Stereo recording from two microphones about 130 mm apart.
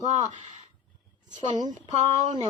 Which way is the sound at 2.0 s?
60° right (ahead or behind).